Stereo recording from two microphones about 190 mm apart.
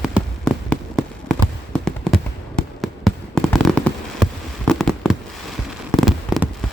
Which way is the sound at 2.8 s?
Centre (ahead or behind).